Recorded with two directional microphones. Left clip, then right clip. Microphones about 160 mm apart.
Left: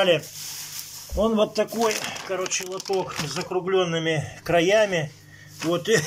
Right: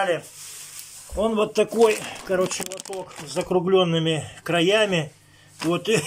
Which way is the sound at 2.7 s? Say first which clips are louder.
Left 5 dB; 75° right (ahead or behind).